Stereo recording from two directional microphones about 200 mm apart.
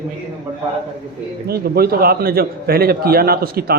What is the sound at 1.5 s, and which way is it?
A man's voice, 50° right (ahead or behind).